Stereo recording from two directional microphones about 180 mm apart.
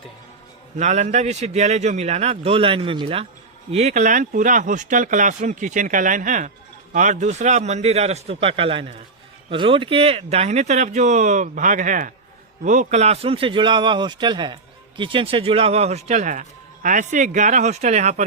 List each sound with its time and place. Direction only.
0.8 s a man's voice: 40° right (ahead or behind)